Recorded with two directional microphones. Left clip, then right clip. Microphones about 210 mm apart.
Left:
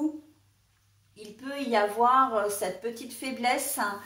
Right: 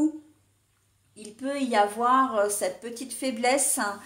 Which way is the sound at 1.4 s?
45° right (ahead or behind).